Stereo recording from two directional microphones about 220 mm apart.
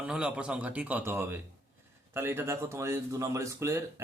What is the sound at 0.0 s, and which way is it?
Speech, 5° right (ahead or behind).